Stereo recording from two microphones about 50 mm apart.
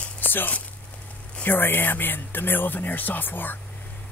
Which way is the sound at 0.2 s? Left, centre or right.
Left.